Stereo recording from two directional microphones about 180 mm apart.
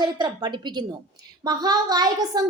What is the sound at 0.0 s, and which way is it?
A woman's voice, 25° right (ahead or behind).